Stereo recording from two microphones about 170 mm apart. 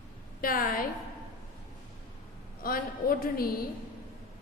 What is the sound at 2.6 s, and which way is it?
Speech, 60° left (ahead or behind).